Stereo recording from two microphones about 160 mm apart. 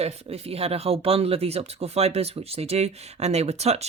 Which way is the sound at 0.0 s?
40° right (ahead or behind).